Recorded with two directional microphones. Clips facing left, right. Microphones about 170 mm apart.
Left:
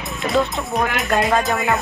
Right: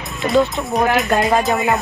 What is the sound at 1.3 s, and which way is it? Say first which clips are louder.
Speech: right 2 dB; 20° right (ahead or behind).